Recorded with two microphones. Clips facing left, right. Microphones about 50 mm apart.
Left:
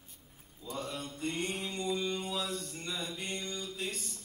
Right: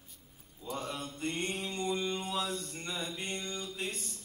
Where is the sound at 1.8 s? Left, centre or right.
Right.